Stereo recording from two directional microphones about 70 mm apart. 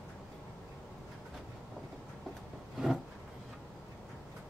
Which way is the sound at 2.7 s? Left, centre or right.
Centre.